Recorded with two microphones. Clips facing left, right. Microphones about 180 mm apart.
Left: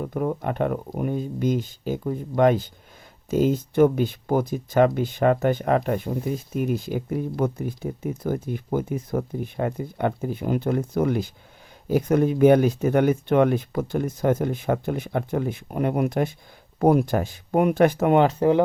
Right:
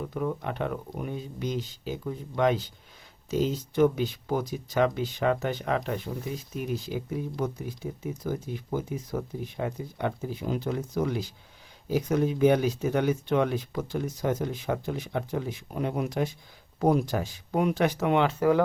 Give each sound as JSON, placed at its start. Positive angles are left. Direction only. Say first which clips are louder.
{"t": 0.0, "sound": "speech", "louder": "left 5 dB", "side_deg": 50}